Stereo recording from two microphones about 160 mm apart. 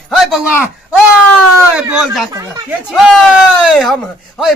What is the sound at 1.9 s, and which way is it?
Speech, centre (ahead or behind).